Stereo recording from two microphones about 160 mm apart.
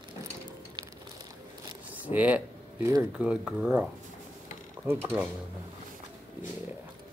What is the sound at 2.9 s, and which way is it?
Speech, 10° right (ahead or behind).